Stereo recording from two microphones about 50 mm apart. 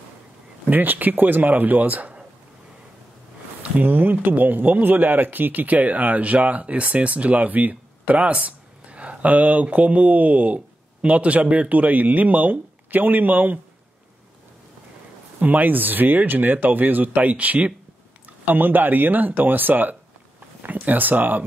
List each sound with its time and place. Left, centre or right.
0.7 s speech: right
3.8 s speech: right
15.4 s speech: right
18.4 s speech: right